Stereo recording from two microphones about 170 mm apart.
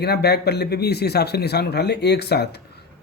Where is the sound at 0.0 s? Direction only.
75° left (ahead or behind).